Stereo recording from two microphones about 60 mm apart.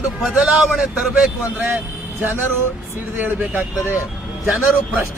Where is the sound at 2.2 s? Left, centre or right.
Right.